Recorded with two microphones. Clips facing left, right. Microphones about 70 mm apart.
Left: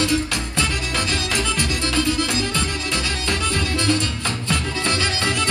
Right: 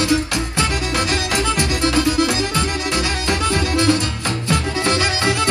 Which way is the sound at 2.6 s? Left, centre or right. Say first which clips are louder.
Right 4 dB; right.